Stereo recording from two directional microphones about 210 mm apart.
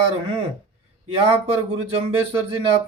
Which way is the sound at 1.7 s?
25° right (ahead or behind).